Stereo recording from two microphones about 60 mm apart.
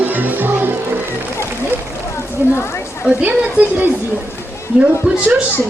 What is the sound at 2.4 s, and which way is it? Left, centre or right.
Speech, right.